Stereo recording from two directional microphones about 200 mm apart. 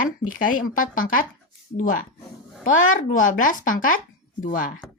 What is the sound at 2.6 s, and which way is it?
A child's voice, 40° left (ahead or behind).